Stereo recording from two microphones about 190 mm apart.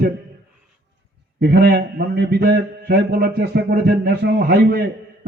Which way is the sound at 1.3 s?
60° right (ahead or behind).